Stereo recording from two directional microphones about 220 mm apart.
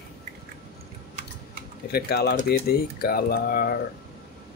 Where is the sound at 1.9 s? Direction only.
45° left (ahead or behind).